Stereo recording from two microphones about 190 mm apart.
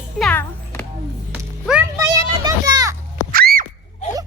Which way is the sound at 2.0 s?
20° right (ahead or behind).